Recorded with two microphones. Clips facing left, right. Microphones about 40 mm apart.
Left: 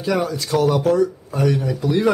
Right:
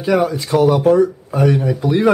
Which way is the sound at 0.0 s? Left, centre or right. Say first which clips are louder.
Right 5 dB; centre.